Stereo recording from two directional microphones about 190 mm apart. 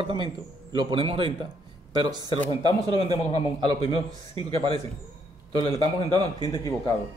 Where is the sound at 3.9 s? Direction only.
25° right (ahead or behind).